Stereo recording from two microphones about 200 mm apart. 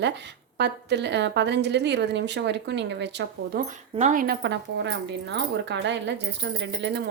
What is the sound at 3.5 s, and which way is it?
A woman's voice, 40° right (ahead or behind).